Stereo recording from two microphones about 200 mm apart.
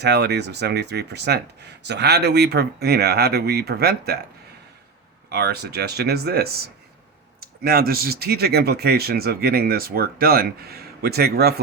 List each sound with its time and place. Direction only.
0.0 s speech: 55° right (ahead or behind)
5.3 s speech: 55° right (ahead or behind)
7.6 s speech: 50° right (ahead or behind)